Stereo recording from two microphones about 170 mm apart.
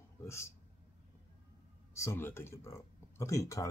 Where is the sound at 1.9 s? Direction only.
15° left (ahead or behind).